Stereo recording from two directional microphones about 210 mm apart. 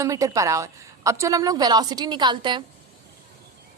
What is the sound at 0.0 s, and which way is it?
A woman's voice, 15° right (ahead or behind).